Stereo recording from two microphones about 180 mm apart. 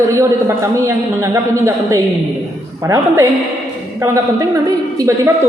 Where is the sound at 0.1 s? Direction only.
15° right (ahead or behind).